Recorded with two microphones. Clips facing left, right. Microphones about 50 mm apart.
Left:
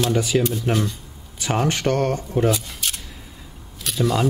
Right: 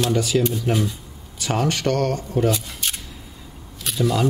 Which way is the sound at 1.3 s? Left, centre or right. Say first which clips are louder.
Even; centre.